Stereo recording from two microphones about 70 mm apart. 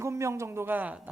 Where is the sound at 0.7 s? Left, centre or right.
Right.